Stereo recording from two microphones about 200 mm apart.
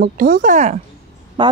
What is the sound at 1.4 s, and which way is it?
Speech, 25° right (ahead or behind).